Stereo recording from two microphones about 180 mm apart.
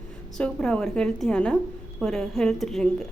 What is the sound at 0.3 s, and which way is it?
A woman's voice, 5° left (ahead or behind).